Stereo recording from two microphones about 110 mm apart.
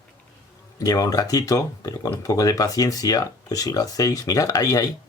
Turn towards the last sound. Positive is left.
turn(degrees=35)  # may be behind; listen again after turning